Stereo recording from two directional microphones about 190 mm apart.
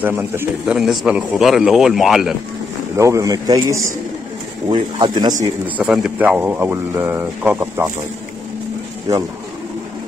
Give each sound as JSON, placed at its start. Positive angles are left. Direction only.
{"t": 0.0, "sound": "a man's voice", "side_deg": -10}
{"t": 3.0, "sound": "speech", "side_deg": -15}
{"t": 4.9, "sound": "speech", "side_deg": -25}
{"t": 5.8, "sound": "speech", "side_deg": -5}